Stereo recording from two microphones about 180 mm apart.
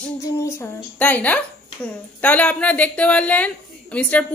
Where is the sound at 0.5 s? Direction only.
10° left (ahead or behind).